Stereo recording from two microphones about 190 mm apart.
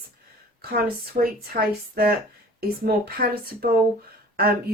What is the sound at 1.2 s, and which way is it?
Speech, 50° right (ahead or behind).